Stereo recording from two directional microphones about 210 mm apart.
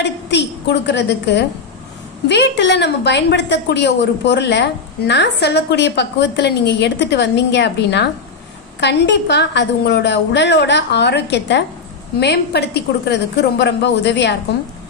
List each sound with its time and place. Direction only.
0.3 s a woman's voice: 55° left (ahead or behind)